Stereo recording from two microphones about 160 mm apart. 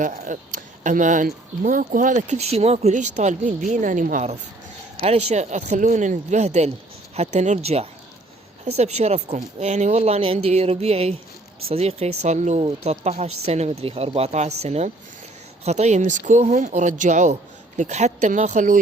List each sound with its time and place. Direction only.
0.0 s speech: 55° right (ahead or behind)
4.9 s speech: 40° right (ahead or behind)